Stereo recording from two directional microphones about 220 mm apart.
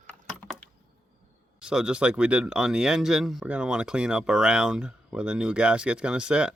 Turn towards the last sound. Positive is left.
turn(degrees=-5)  # may be behind; listen again after turning